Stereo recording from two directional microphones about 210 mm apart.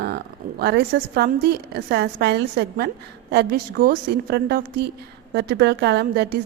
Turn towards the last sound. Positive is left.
turn(degrees=-50)  # may be behind; listen again after turning